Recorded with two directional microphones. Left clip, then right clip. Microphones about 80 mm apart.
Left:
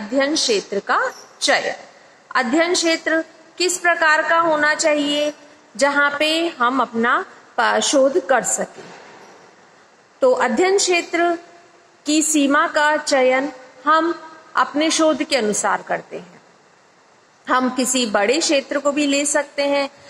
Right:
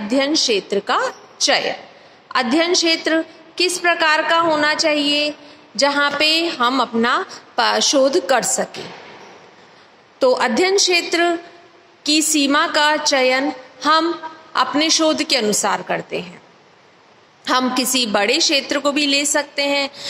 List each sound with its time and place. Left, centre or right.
0.0 s a woman's voice: right
7.5 s a woman's voice: right
8.6 s a woman's voice: right
10.4 s a woman's voice: right
12.0 s a woman's voice: right
12.4 s a woman's voice: right
12.7 s a woman's voice: right
17.7 s a woman's voice: right
18.0 s a woman's voice: right